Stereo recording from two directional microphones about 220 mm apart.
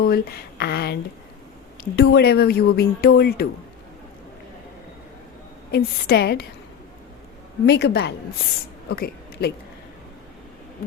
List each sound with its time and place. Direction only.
0.0 s speech: 45° left (ahead or behind)
5.7 s speech: 45° left (ahead or behind)
7.7 s speech: 50° left (ahead or behind)
8.9 s a sound: 45° left (ahead or behind)